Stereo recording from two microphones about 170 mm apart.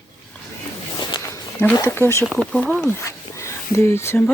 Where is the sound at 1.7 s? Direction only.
15° left (ahead or behind).